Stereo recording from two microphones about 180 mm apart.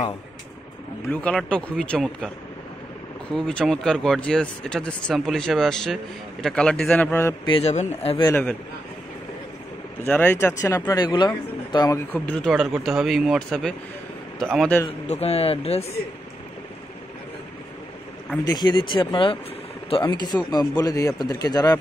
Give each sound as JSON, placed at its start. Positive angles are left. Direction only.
{"t": 1.1, "sound": "speech", "side_deg": 5}
{"t": 7.4, "sound": "a man's voice", "side_deg": 30}
{"t": 8.3, "sound": "speech", "side_deg": 10}
{"t": 10.0, "sound": "speech", "side_deg": 10}
{"t": 12.1, "sound": "speech", "side_deg": 5}
{"t": 14.9, "sound": "a man's voice", "side_deg": 35}
{"t": 18.5, "sound": "speech", "side_deg": 25}